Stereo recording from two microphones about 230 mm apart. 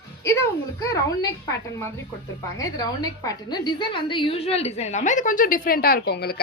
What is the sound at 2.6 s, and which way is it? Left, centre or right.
A woman's voice, centre.